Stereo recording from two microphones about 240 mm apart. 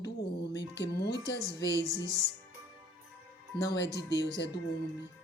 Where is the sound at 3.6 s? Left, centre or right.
Left.